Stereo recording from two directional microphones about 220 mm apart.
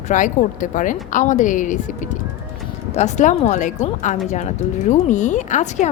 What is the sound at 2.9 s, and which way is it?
A woman's voice, 30° left (ahead or behind).